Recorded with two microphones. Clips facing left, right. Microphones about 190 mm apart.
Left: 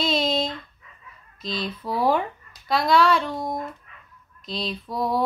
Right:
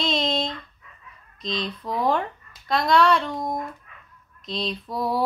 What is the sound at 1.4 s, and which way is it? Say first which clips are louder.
A woman's voice: even; 5° left (ahead or behind).